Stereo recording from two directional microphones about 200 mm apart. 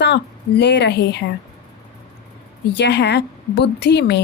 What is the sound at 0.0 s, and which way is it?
A woman's voice, 60° left (ahead or behind).